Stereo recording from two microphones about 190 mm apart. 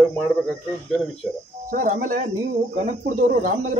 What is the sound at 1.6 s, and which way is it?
Speech, 45° right (ahead or behind).